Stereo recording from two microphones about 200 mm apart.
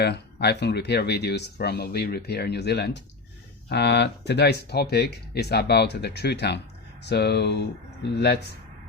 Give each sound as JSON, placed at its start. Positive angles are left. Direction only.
{"t": 0.0, "sound": "speech", "side_deg": 55}